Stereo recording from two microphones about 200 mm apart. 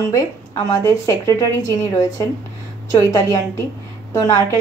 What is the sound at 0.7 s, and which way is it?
A woman's voice, 15° left (ahead or behind).